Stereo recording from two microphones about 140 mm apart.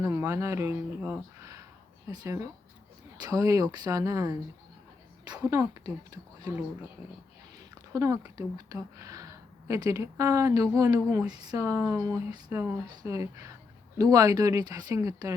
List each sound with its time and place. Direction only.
0.0 s speech: 20° right (ahead or behind)
5.5 s speech: 25° right (ahead or behind)
7.9 s speech: 25° right (ahead or behind)